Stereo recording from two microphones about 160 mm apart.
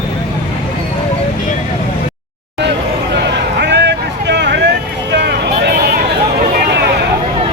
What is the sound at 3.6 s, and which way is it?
Vehicle, 90° right.